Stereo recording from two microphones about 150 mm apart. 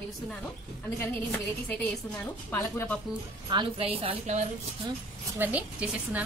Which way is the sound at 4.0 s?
45° right (ahead or behind).